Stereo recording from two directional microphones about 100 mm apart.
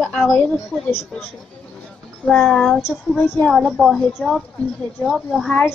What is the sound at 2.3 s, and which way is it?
A woman's voice, centre (ahead or behind).